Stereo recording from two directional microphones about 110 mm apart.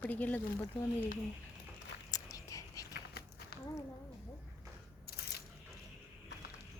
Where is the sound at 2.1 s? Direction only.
30° left (ahead or behind).